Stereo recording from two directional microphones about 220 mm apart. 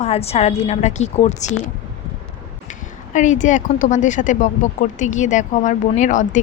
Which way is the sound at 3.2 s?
35° left (ahead or behind).